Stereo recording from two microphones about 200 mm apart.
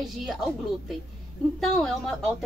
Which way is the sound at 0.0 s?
Centre (ahead or behind).